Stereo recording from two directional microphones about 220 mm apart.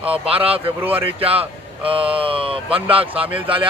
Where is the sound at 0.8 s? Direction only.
10° right (ahead or behind).